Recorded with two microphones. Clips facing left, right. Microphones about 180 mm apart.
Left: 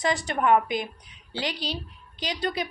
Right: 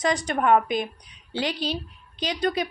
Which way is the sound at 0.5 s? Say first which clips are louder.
Right 2 dB; 20° right (ahead or behind).